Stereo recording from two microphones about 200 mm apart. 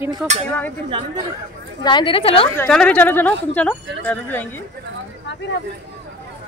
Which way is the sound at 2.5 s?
5° left (ahead or behind).